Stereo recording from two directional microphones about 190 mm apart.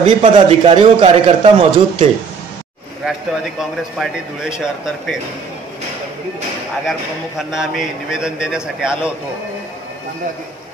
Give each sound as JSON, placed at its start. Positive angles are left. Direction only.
{"t": 0.0, "sound": "a man's voice", "side_deg": -30}
{"t": 4.0, "sound": "a man's voice", "side_deg": -5}
{"t": 6.9, "sound": "a man's voice", "side_deg": 0}